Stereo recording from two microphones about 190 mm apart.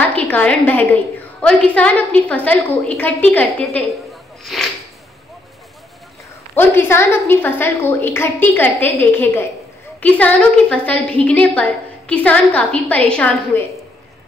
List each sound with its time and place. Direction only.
0.1 s a woman's voice: 10° left (ahead or behind)
6.5 s a woman's voice: 10° left (ahead or behind)